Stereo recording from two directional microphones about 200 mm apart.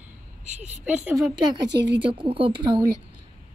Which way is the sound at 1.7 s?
60° right (ahead or behind).